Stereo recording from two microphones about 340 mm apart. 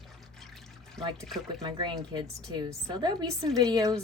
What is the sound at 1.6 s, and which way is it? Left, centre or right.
A woman's voice, centre.